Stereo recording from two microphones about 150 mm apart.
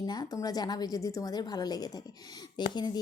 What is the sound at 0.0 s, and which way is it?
Speech, 25° left (ahead or behind).